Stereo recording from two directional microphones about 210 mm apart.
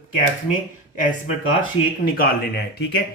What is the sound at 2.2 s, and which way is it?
Speech, 50° left (ahead or behind).